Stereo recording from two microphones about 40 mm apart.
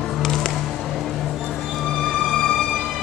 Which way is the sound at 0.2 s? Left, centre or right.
Centre.